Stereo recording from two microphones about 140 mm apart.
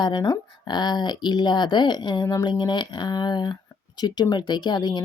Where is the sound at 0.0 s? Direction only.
30° left (ahead or behind).